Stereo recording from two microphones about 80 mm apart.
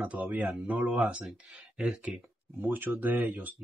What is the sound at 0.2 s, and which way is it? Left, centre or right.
Speech, centre.